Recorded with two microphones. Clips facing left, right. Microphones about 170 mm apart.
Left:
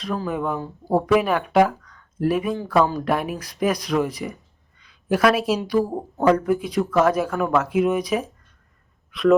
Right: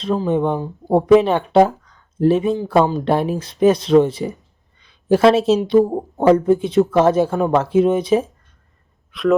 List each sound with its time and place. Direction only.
0.0 s speech: 25° right (ahead or behind)
9.1 s speech: centre (ahead or behind)